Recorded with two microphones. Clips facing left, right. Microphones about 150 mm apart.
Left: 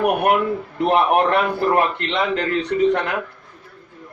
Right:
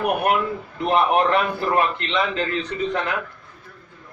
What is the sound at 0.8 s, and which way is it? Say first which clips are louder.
A man's voice: left 2 dB; 60° left (ahead or behind).